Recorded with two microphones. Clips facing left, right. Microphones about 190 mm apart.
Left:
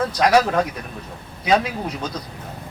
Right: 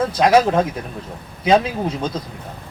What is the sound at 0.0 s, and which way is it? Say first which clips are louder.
Speech: right 3 dB; 25° right (ahead or behind).